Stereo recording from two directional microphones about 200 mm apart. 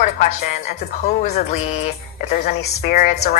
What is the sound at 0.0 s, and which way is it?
A woman's voice, 40° left (ahead or behind).